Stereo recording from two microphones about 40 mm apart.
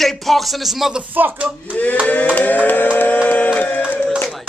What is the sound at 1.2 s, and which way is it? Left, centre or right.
Speech, right.